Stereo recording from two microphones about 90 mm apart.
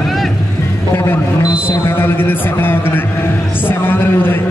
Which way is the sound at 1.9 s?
25° left (ahead or behind).